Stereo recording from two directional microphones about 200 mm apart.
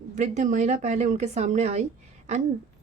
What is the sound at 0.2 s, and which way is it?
A woman's voice, 35° right (ahead or behind).